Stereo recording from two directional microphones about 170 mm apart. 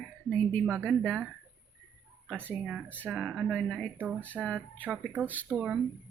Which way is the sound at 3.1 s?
5° right (ahead or behind).